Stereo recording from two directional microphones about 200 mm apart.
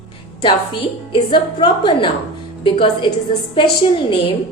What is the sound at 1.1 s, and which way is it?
A woman's voice, 25° left (ahead or behind).